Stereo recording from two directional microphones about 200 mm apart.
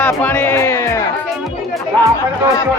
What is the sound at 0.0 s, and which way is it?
Music, 10° left (ahead or behind).